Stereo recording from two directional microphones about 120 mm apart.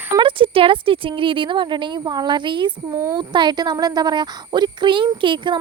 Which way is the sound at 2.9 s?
25° right (ahead or behind).